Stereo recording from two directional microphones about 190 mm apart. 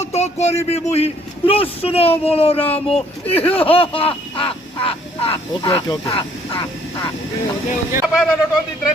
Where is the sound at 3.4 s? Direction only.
30° left (ahead or behind).